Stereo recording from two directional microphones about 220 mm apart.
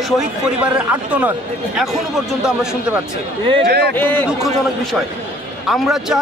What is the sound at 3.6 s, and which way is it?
Speech, 45° right (ahead or behind).